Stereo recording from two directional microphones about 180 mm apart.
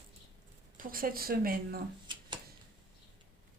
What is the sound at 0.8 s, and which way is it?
Speech, 50° right (ahead or behind).